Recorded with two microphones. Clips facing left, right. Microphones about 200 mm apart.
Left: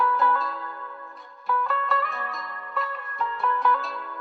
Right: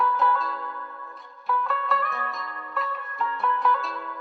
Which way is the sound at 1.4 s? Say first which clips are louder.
Even; centre (ahead or behind).